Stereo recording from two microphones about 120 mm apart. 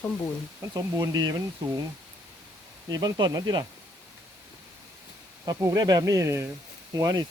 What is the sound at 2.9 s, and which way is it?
Speech, 30° right (ahead or behind).